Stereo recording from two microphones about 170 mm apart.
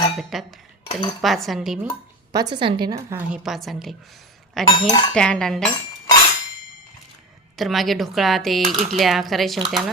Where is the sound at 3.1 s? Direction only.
5° right (ahead or behind).